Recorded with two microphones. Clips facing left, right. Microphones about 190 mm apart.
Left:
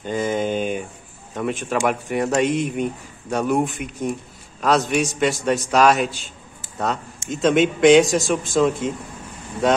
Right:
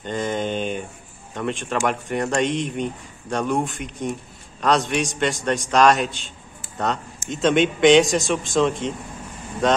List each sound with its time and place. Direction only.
0.0 s a sound: 5° left (ahead or behind)
1.3 s speech: 5° left (ahead or behind)
7.2 s a man's voice: centre (ahead or behind)